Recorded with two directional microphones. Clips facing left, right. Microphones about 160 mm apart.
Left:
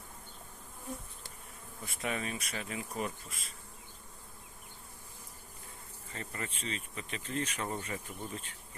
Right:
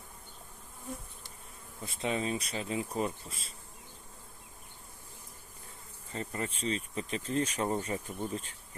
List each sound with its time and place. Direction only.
1.8 s bee: 25° right (ahead or behind)
6.1 s speech: 30° right (ahead or behind)